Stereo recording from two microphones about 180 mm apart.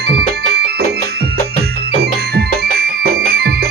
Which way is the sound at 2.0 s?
60° right (ahead or behind).